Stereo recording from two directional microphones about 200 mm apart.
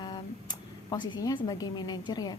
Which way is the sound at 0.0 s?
20° left (ahead or behind).